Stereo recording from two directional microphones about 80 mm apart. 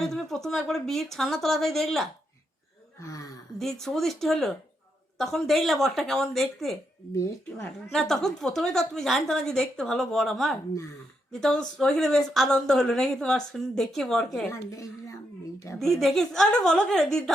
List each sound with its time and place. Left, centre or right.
0.0 s speech: centre
3.0 s speech: left
3.6 s speech: centre
7.2 s speech: left
7.9 s a woman's voice: centre
14.5 s a woman's voice: left
15.8 s a woman's voice: centre